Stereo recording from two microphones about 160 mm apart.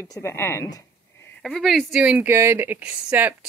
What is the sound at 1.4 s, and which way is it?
Speech, centre (ahead or behind).